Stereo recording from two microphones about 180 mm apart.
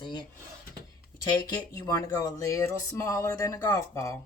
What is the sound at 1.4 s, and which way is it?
Speech, 20° left (ahead or behind).